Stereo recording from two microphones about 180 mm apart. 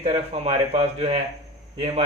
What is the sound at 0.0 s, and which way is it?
Speech, 35° right (ahead or behind).